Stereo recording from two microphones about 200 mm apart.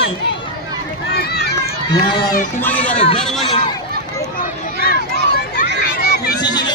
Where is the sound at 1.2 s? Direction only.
55° left (ahead or behind).